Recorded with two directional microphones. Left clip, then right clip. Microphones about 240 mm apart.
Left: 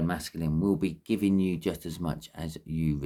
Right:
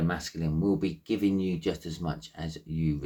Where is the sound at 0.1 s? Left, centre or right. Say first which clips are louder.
Even; left.